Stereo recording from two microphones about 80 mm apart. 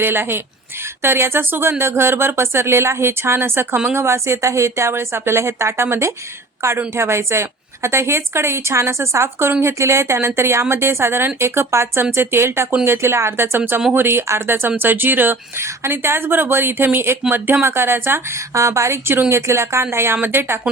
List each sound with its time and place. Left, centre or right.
0.0 s a woman's voice: right